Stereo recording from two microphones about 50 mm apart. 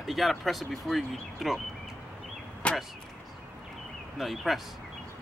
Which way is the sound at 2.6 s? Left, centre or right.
Left.